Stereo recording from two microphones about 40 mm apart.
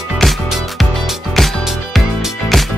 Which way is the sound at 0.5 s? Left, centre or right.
Centre.